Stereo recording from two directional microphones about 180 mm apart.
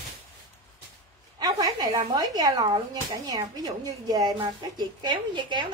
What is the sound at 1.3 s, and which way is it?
Speech, 20° right (ahead or behind).